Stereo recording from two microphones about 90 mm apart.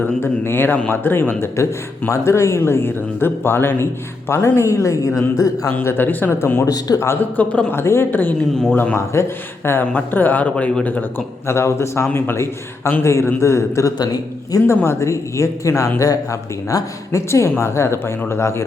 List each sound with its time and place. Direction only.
0.2 s a man's voice: 25° left (ahead or behind)
5.7 s speech: 25° left (ahead or behind)
6.7 s a man's voice: 45° left (ahead or behind)
7.0 s speech: 25° left (ahead or behind)
7.7 s speech: 30° left (ahead or behind)
11.4 s a man's voice: 30° left (ahead or behind)